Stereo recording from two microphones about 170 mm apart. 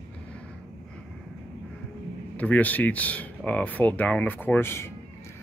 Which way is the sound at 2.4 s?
10° left (ahead or behind).